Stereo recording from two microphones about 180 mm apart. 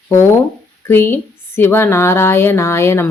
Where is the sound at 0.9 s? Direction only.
15° left (ahead or behind).